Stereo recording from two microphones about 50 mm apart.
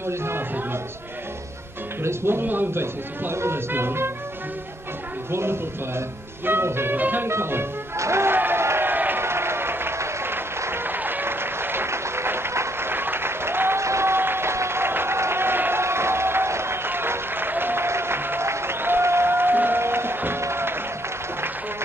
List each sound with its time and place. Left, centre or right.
0.0 s speech: right
2.0 s speech: right
2.4 s speech: right
5.3 s speech: right
7.0 s music: right
7.2 s music: right
8.0 s speech: right
8.4 s run: right
8.9 s a sound: right
9.2 s applause: right
13.8 s applause: right
15.8 s applause: right
18.5 s music: right